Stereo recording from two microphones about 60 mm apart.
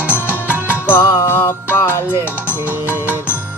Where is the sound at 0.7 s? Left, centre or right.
Left.